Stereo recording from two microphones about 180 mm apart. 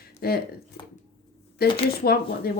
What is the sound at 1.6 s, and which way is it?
Speech, 60° left (ahead or behind).